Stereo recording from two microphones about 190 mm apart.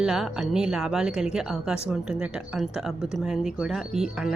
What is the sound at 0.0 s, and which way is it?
Speech, 5° right (ahead or behind).